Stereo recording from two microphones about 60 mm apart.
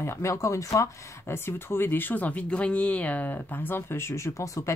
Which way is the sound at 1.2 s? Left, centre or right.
Left.